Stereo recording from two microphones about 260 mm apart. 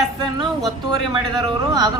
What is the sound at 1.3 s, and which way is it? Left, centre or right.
Speech, centre.